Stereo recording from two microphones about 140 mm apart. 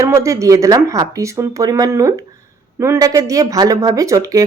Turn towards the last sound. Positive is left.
turn(degrees=-25)  # may be behind; listen again after turning